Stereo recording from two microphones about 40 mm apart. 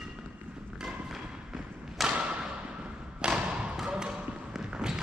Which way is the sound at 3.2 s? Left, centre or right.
Right.